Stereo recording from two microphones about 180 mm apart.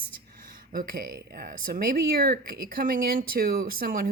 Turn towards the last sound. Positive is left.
turn(degrees=-55)  # may be behind; listen again after turning